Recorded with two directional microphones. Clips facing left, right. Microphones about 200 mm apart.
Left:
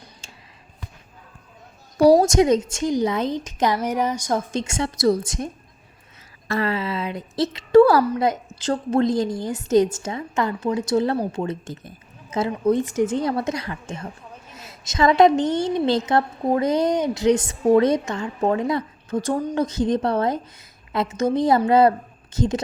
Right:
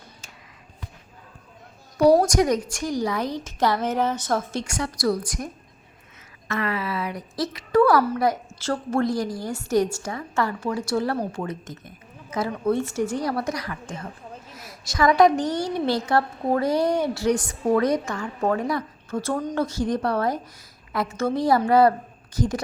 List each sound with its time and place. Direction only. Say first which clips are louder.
2.2 s a woman's voice: left 4 dB; 25° left (ahead or behind)
6.5 s a woman's voice: left 3 dB; 30° left (ahead or behind)